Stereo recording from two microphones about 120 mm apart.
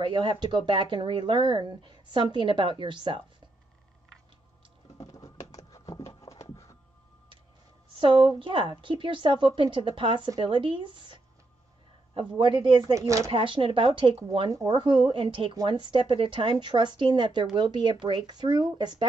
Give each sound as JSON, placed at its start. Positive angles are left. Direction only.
{"t": 0.0, "sound": "a woman's voice", "side_deg": -45}
{"t": 5.0, "sound": "a sound", "side_deg": 30}
{"t": 8.0, "sound": "a woman's voice", "side_deg": -45}
{"t": 12.4, "sound": "a woman's voice", "side_deg": -45}
{"t": 12.9, "sound": "speech", "side_deg": -25}
{"t": 13.3, "sound": "a woman's voice", "side_deg": -45}
{"t": 14.5, "sound": "a woman's voice", "side_deg": -35}